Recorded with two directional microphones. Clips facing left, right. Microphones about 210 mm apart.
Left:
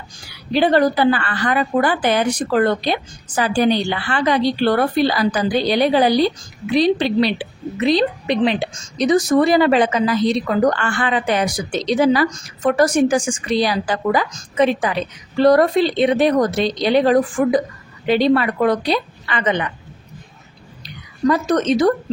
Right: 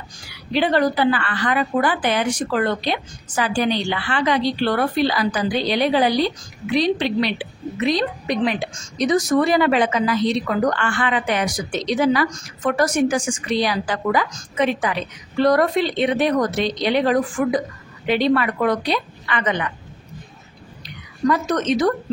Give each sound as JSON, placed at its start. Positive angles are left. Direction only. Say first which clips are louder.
{"t": 0.5, "sound": "a woman's voice", "louder": "left 3 dB", "side_deg": 35}
{"t": 21.3, "sound": "a woman's voice", "louder": "left 3 dB", "side_deg": 35}